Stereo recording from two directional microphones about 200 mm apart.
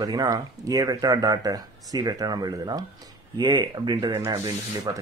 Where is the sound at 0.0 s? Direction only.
15° right (ahead or behind).